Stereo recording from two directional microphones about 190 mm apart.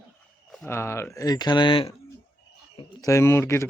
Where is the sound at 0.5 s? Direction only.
10° left (ahead or behind).